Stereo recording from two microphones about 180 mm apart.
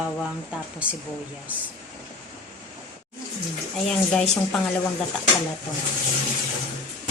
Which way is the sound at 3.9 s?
5° left (ahead or behind).